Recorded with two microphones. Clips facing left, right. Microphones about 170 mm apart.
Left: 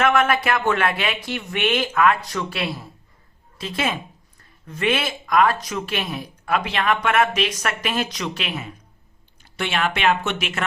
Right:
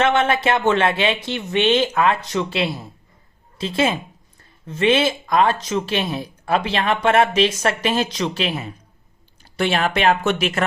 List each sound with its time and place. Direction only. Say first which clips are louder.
0.0 s speech: right 1 dB; 25° right (ahead or behind)